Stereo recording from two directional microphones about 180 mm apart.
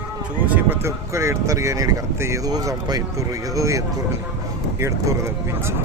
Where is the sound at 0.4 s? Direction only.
10° right (ahead or behind).